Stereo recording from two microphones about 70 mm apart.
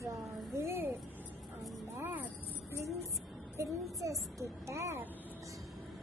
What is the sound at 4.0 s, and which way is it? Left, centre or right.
Speech, right.